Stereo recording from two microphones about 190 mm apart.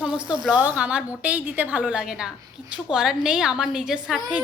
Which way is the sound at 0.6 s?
5° right (ahead or behind).